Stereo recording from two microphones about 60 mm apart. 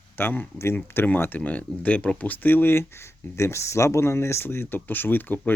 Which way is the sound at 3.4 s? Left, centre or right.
Left.